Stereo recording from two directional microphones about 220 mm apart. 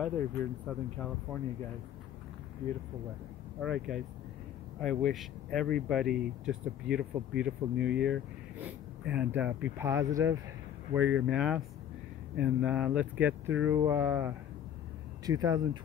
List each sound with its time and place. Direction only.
0.0 s speech: 5° left (ahead or behind)
3.6 s speech: centre (ahead or behind); by 15.8 s 15° right (ahead or behind)